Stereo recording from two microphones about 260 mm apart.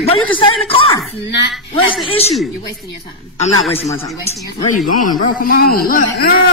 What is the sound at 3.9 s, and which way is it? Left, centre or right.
Speech, centre.